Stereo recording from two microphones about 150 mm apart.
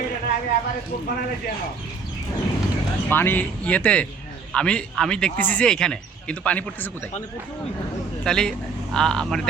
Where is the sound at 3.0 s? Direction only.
15° left (ahead or behind).